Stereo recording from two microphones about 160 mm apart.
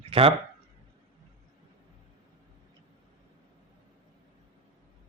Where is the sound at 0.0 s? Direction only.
35° right (ahead or behind).